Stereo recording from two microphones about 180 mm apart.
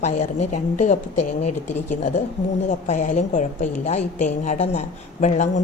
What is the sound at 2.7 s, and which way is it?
A woman's voice, 45° left (ahead or behind).